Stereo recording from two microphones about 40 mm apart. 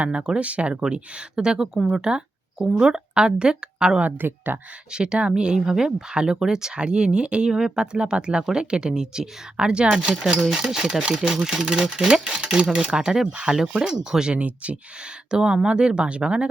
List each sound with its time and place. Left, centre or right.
0.0 s speech: right
0.8 s speech: right
4.0 s speech: right
4.9 s speech: right
14.3 s speech: right
15.3 s speech: centre